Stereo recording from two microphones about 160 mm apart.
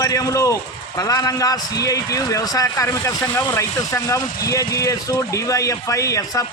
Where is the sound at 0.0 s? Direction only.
20° left (ahead or behind).